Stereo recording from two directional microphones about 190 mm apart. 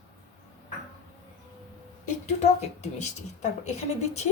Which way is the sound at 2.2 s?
35° left (ahead or behind).